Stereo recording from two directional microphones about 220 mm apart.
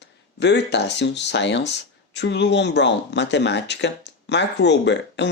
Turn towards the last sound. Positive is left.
turn(degrees=50)  # may be behind; listen again after turning